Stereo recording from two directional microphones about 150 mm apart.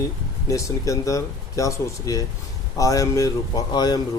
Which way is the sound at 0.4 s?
20° left (ahead or behind).